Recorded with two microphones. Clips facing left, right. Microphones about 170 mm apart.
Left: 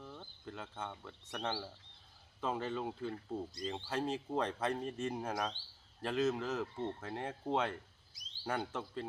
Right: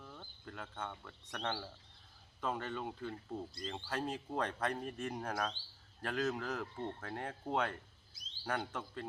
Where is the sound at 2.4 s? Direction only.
25° left (ahead or behind).